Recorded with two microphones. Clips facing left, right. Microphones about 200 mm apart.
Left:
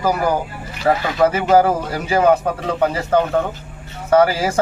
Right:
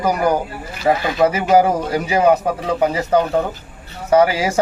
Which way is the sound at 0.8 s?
10° right (ahead or behind).